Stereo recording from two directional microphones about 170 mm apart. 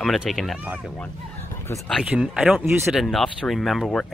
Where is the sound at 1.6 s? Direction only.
10° left (ahead or behind).